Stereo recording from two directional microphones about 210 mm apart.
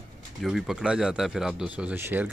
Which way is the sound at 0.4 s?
Centre (ahead or behind).